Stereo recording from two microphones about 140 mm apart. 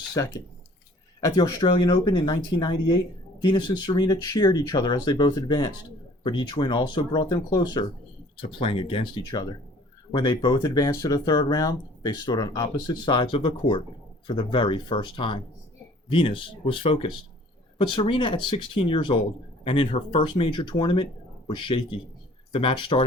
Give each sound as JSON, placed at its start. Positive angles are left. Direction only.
{"t": 0.1, "sound": "speech", "side_deg": 30}
{"t": 9.2, "sound": "speech", "side_deg": 25}